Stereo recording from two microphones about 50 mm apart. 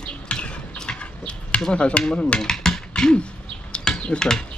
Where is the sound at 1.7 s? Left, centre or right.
Left.